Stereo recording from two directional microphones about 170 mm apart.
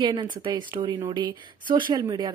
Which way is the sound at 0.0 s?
30° right (ahead or behind).